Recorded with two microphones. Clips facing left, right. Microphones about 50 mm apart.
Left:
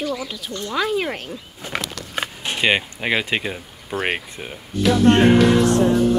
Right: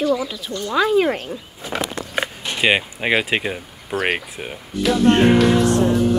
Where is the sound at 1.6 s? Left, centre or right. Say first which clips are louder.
Right 3 dB; right.